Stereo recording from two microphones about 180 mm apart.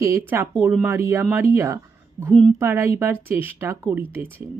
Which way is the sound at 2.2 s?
40° right (ahead or behind).